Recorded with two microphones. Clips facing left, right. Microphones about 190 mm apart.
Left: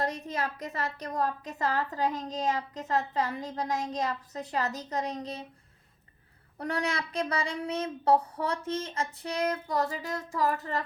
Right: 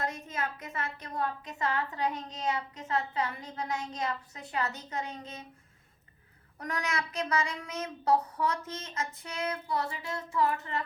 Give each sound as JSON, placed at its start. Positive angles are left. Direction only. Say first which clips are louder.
{"t": 0.0, "sound": "a woman's voice", "louder": "left 3 dB", "side_deg": 35}
{"t": 6.6, "sound": "a woman's voice", "louder": "left 3 dB", "side_deg": 30}